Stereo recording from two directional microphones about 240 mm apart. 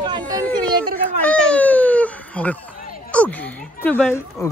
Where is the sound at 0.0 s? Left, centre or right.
Centre.